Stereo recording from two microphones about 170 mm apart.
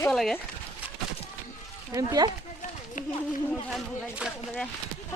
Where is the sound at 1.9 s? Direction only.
20° right (ahead or behind).